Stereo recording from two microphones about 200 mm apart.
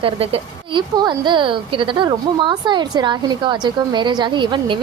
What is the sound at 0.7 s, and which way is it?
A woman's voice, 20° right (ahead or behind).